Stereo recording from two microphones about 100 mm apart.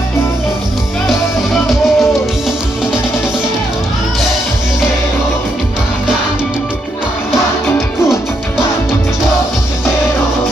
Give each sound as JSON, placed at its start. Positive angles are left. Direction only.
{"t": 1.0, "sound": "music", "side_deg": 0}